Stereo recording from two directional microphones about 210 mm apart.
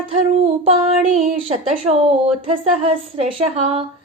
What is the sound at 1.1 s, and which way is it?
A woman's voice, 30° right (ahead or behind).